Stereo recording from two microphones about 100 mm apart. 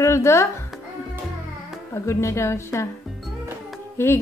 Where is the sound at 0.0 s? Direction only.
30° left (ahead or behind).